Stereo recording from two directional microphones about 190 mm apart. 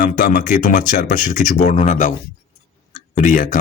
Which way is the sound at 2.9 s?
45° left (ahead or behind).